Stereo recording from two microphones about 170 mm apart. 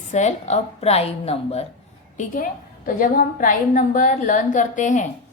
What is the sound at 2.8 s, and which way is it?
A woman's voice, 55° left (ahead or behind).